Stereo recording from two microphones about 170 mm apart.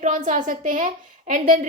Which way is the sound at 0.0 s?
50° right (ahead or behind).